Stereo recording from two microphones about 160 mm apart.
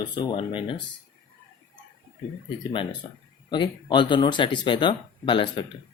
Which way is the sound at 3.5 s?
30° left (ahead or behind).